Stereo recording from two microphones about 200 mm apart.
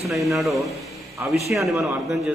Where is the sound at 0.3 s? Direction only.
Centre (ahead or behind).